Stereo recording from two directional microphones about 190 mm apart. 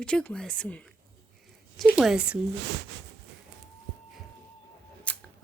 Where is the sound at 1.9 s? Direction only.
5° right (ahead or behind).